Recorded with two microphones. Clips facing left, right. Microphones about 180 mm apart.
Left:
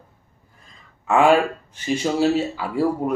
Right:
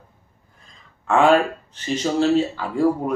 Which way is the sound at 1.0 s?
5° left (ahead or behind).